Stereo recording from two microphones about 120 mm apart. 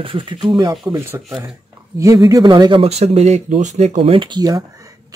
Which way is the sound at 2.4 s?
40° right (ahead or behind).